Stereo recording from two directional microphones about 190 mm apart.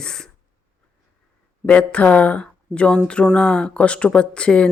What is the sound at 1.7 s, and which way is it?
Speech, 5° left (ahead or behind).